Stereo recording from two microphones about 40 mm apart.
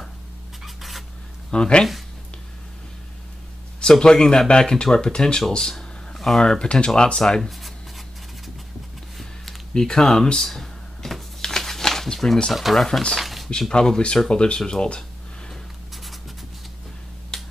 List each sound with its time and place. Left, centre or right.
0.7 s a sound: centre
1.5 s speech: left
3.9 s speech: centre
9.8 s drawer open or close: centre
11.4 s a sound: centre
12.7 s speech: centre
13.1 s a sound: centre
13.5 s speech: centre
15.9 s writing: centre
17.3 s finger snapping: centre